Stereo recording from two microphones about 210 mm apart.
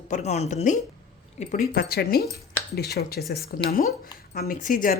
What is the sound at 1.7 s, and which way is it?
A woman's voice, 45° left (ahead or behind).